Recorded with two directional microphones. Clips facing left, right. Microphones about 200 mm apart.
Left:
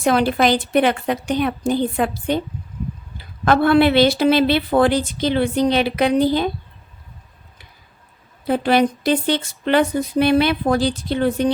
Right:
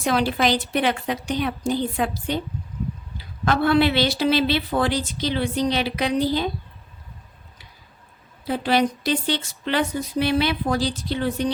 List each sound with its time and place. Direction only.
0.0 s a woman's voice: 55° left (ahead or behind)
8.4 s speech: 55° left (ahead or behind)